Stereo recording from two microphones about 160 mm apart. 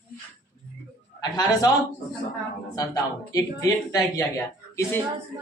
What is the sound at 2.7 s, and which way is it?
Speech, 20° left (ahead or behind).